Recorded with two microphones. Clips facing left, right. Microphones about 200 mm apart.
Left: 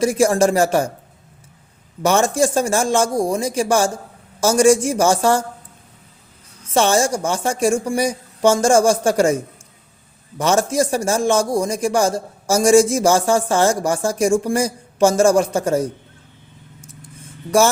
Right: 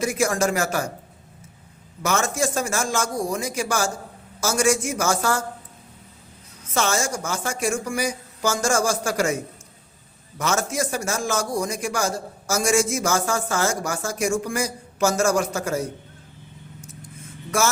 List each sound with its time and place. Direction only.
0.0 s a man's voice: 30° left (ahead or behind)
2.0 s a man's voice: 30° left (ahead or behind)
6.7 s a man's voice: 30° left (ahead or behind)
10.3 s a man's voice: 30° left (ahead or behind)